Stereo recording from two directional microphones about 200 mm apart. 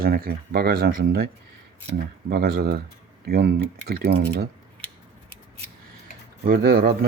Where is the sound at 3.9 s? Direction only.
50° right (ahead or behind).